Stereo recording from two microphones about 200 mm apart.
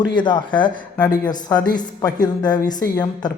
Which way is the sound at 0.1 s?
25° left (ahead or behind).